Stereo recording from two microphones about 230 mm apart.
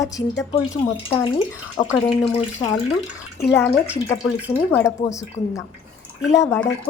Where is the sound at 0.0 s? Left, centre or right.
Centre.